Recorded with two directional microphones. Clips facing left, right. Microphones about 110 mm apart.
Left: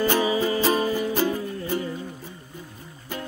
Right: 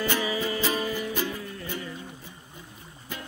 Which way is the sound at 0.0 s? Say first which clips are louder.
Left 6 dB; 35° left (ahead or behind).